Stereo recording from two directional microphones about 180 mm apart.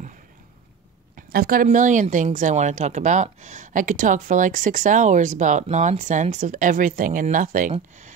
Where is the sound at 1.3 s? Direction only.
55° right (ahead or behind).